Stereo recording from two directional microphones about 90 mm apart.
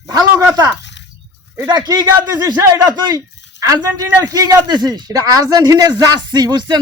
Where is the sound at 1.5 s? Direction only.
50° right (ahead or behind).